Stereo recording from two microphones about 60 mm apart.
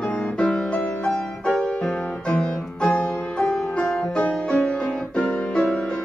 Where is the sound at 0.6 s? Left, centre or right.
Centre.